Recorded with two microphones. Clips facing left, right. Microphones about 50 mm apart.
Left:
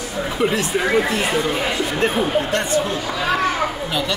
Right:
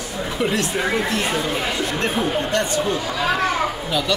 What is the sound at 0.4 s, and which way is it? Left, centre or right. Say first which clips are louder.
Speech: left 2 dB; centre.